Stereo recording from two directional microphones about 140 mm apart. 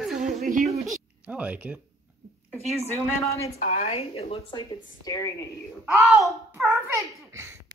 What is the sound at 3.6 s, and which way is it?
A woman's voice, 50° left (ahead or behind).